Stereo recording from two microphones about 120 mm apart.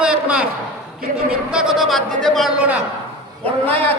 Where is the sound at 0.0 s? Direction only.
10° right (ahead or behind).